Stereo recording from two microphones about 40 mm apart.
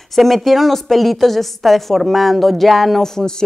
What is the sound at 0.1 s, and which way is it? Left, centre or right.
A woman's voice, centre.